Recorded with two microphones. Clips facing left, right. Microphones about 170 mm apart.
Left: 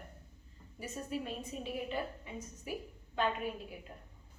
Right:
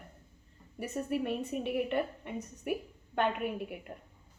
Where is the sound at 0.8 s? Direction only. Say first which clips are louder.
Right 6 dB; 65° right (ahead or behind).